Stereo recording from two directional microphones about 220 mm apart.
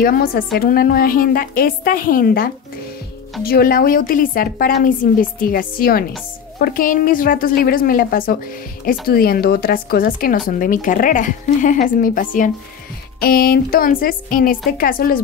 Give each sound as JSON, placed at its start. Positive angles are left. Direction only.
{"t": 0.0, "sound": "speech", "side_deg": 40}